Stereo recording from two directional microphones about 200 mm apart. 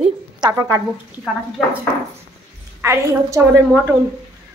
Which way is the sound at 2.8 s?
15° right (ahead or behind).